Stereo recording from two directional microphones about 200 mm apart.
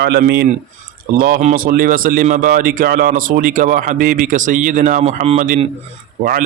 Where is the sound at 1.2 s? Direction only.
40° right (ahead or behind).